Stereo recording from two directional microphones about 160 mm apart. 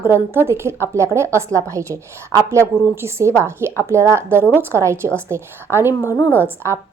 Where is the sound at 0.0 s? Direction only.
15° right (ahead or behind).